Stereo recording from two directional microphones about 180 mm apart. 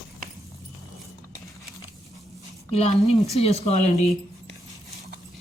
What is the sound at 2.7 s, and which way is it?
Speech, 35° left (ahead or behind).